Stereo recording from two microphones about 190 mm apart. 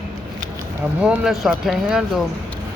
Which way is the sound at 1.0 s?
5° right (ahead or behind).